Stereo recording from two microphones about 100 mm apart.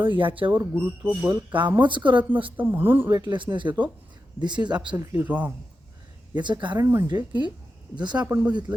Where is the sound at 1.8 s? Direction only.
55° right (ahead or behind).